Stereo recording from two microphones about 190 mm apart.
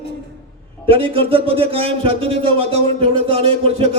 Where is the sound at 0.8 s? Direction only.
30° right (ahead or behind).